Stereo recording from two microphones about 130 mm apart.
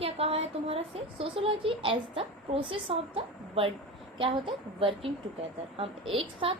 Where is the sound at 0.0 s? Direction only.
50° right (ahead or behind).